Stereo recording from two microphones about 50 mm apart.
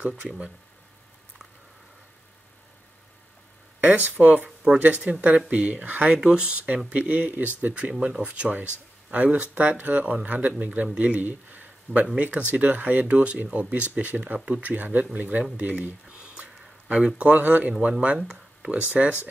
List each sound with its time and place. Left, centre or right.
3.8 s speech: right
6.1 s speech: centre
8.3 s speech: right
16.1 s a sound: right
16.9 s speech: right
17.8 s speech: right
18.2 s a sound: centre
18.7 s speech: right